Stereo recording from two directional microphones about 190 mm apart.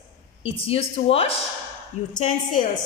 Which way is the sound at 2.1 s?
45° left (ahead or behind).